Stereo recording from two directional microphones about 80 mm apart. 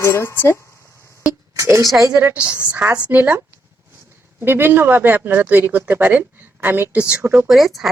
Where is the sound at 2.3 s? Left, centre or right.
Centre.